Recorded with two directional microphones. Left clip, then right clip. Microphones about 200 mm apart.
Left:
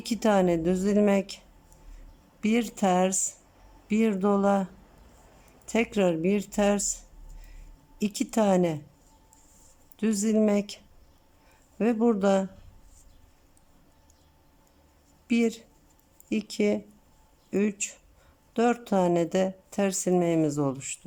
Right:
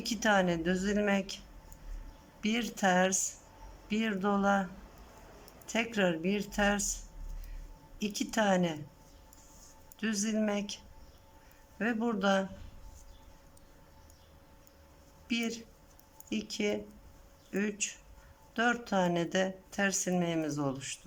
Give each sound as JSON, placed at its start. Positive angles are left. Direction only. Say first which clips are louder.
{"t": 0.0, "sound": "speech", "louder": "left 4 dB", "side_deg": 20}
{"t": 2.4, "sound": "speech", "louder": "left 5 dB", "side_deg": 20}
{"t": 5.7, "sound": "speech", "louder": "left 6 dB", "side_deg": 20}
{"t": 7.9, "sound": "speech", "louder": "left 5 dB", "side_deg": 20}
{"t": 10.0, "sound": "speech", "louder": "left 8 dB", "side_deg": 20}
{"t": 11.8, "sound": "speech", "louder": "left 8 dB", "side_deg": 20}
{"t": 15.3, "sound": "speech", "louder": "left 8 dB", "side_deg": 20}